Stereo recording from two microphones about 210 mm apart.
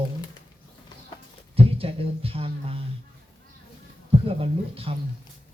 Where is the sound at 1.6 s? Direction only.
25° right (ahead or behind).